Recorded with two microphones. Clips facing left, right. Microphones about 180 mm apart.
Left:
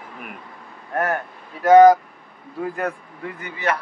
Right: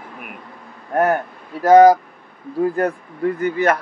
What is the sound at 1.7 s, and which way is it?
Speech, 35° right (ahead or behind).